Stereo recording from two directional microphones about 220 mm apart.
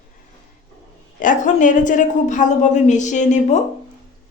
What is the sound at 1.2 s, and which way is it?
Speech, 35° left (ahead or behind).